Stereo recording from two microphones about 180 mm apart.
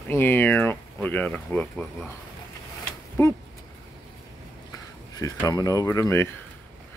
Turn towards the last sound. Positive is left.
turn(degrees=15)  # may be behind; listen again after turning